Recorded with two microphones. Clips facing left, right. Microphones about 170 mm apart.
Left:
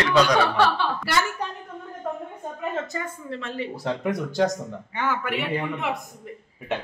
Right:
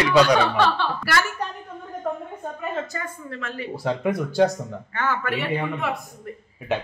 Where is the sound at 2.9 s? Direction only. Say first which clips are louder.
Left 1 dB; 25° left (ahead or behind).